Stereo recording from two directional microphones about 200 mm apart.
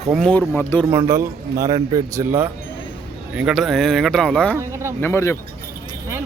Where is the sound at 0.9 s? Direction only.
15° right (ahead or behind); by 4.5 s 5° left (ahead or behind).